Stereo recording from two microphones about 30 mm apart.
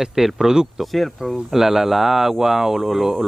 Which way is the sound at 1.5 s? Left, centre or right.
Centre.